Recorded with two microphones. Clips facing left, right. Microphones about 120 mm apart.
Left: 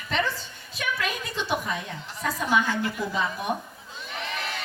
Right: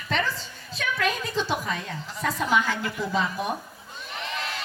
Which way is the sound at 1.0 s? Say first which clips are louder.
Right 4 dB; centre (ahead or behind).